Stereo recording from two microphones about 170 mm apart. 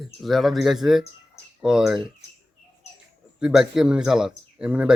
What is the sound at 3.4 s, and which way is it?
Speech, 5° right (ahead or behind).